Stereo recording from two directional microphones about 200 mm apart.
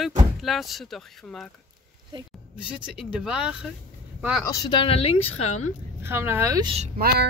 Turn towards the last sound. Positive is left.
turn(degrees=-50)  # may be behind; listen again after turning